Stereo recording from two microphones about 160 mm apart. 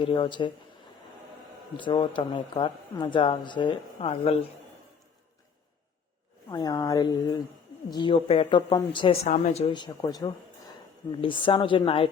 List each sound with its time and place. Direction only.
0.0 s a woman's voice: 30° left (ahead or behind)
1.7 s a woman's voice: 30° left (ahead or behind)
6.5 s a woman's voice: 25° left (ahead or behind); by 9.7 s 45° left (ahead or behind)
9.7 s a woman's voice: 25° left (ahead or behind)